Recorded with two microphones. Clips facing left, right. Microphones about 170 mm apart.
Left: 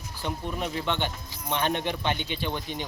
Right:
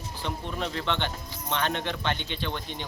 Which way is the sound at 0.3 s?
10° left (ahead or behind).